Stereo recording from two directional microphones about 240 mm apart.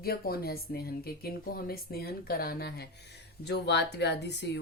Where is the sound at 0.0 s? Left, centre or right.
Left.